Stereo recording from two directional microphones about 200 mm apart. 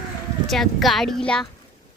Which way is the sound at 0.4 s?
Centre (ahead or behind).